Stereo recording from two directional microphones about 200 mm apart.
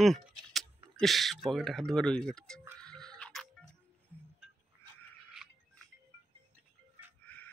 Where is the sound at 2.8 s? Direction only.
5° left (ahead or behind).